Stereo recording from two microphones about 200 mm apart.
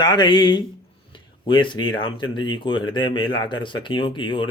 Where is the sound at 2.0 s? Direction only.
25° left (ahead or behind).